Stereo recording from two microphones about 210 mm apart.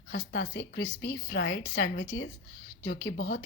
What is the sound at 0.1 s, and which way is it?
A woman's voice, 55° left (ahead or behind).